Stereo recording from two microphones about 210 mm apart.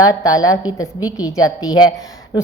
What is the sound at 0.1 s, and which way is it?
Speech, 15° left (ahead or behind).